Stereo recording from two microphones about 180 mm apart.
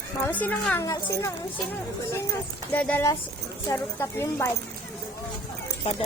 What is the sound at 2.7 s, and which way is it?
A woman's voice, 10° left (ahead or behind).